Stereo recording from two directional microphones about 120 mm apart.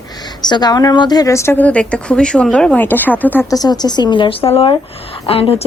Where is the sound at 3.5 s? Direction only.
35° left (ahead or behind).